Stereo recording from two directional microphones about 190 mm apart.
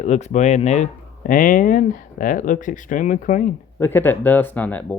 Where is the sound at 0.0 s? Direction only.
35° left (ahead or behind).